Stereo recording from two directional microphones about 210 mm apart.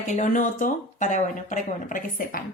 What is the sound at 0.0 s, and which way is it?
A woman's voice, 35° left (ahead or behind).